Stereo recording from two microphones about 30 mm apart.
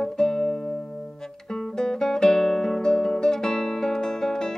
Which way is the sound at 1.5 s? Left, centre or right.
Left.